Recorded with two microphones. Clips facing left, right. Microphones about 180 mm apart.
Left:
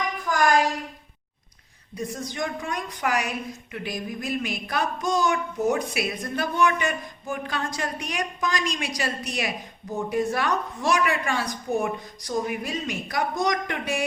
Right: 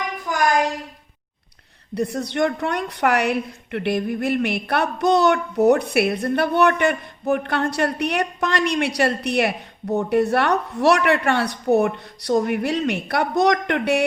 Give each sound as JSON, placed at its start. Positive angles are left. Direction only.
{"t": 2.0, "sound": "a woman's voice", "side_deg": -70}